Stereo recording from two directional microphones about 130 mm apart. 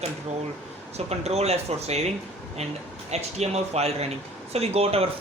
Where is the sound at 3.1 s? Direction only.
55° right (ahead or behind).